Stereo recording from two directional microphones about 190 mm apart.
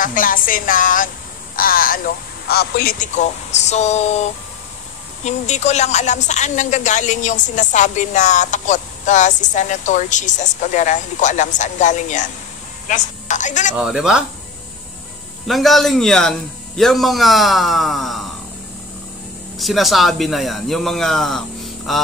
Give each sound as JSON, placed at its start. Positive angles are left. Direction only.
{"t": 0.0, "sound": "a woman's voice", "side_deg": 45}
{"t": 13.7, "sound": "a man's voice", "side_deg": -5}
{"t": 15.4, "sound": "a man's voice", "side_deg": 0}
{"t": 19.6, "sound": "a man's voice", "side_deg": 0}